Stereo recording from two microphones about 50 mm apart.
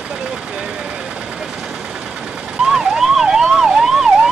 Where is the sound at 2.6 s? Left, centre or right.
Centre.